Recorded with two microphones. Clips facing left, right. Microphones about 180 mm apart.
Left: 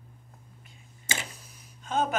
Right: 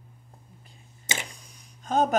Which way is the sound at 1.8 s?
40° right (ahead or behind).